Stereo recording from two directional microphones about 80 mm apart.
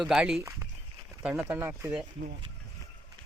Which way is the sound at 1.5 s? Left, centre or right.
Right.